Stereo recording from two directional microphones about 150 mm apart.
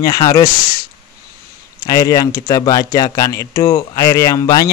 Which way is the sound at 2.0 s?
20° left (ahead or behind).